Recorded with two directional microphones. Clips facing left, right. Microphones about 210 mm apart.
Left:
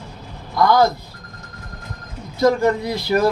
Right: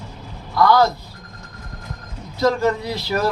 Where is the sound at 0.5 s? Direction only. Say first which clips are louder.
Even; 15° left (ahead or behind).